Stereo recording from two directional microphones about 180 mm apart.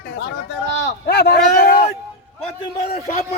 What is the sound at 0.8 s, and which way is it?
Speech, 60° left (ahead or behind).